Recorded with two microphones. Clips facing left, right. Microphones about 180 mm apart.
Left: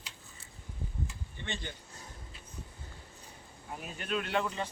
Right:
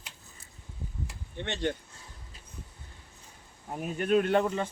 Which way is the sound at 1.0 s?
70° right (ahead or behind).